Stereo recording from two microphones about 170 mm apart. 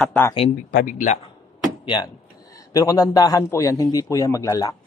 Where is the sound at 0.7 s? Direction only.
55° left (ahead or behind).